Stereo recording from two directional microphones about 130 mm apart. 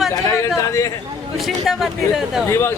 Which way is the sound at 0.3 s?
25° left (ahead or behind).